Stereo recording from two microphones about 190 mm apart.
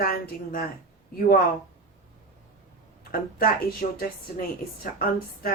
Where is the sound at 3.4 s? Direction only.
50° left (ahead or behind).